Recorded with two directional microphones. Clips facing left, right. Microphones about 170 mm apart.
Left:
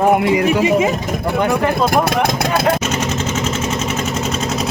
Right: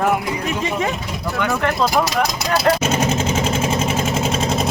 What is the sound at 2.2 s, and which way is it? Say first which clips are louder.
Vehicle: left 5 dB; 55° left (ahead or behind).